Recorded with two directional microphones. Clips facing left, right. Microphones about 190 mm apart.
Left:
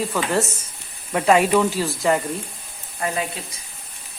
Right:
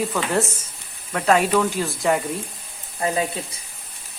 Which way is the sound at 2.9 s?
25° right (ahead or behind).